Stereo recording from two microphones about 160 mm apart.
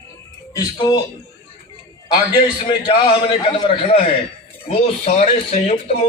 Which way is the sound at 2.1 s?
30° left (ahead or behind).